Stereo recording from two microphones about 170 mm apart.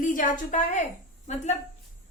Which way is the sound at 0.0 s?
50° left (ahead or behind).